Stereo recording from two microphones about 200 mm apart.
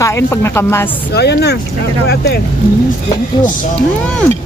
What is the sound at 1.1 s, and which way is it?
Speech, 55° left (ahead or behind).